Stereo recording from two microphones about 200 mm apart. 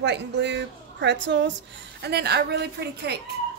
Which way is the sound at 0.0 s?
60° right (ahead or behind).